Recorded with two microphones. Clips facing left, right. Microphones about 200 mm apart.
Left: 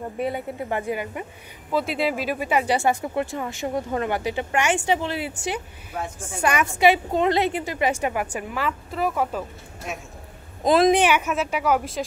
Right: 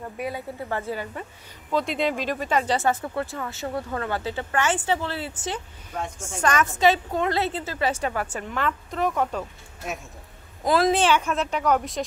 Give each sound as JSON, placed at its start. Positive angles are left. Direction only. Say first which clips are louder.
{"t": 0.2, "sound": "speech", "louder": "left 4 dB", "side_deg": 20}
{"t": 1.7, "sound": "speech", "louder": "left 1 dB", "side_deg": 5}
{"t": 7.1, "sound": "speech", "louder": "left 4 dB", "side_deg": 20}
{"t": 10.6, "sound": "speech", "louder": "left 3 dB", "side_deg": 20}